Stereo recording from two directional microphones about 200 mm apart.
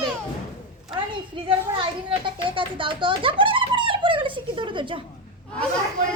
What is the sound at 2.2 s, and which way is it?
Giggle, 25° right (ahead or behind).